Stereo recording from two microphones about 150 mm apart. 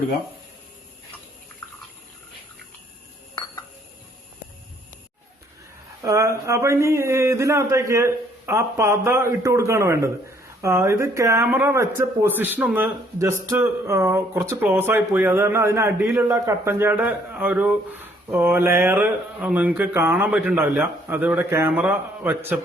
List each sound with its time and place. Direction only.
6.0 s speech: 20° right (ahead or behind)